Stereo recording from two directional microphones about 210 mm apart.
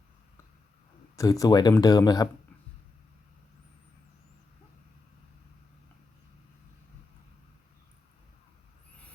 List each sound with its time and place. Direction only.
1.1 s speech: 15° left (ahead or behind)